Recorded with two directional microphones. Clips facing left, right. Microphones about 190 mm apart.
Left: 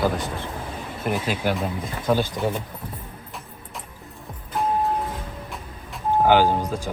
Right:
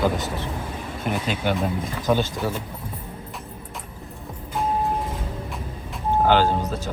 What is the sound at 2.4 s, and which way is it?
Speech, 20° left (ahead or behind).